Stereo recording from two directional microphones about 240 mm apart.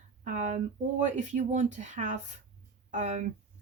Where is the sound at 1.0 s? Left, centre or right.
Right.